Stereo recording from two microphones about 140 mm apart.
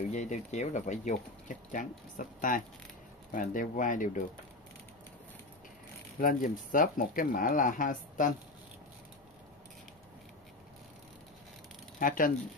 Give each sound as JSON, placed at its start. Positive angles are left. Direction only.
{"t": 0.1, "sound": "speech", "side_deg": 60}
{"t": 6.2, "sound": "speech", "side_deg": 80}
{"t": 12.0, "sound": "speech", "side_deg": 75}